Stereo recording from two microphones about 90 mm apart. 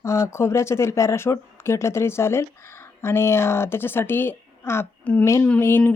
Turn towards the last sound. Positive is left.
turn(degrees=25)  # may be behind; listen again after turning